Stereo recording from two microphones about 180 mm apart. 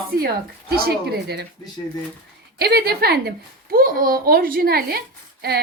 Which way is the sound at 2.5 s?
60° right (ahead or behind).